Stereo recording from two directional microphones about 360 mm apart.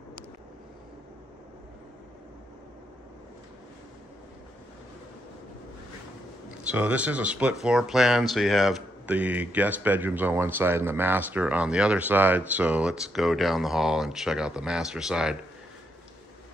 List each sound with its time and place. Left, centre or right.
6.6 s speech: centre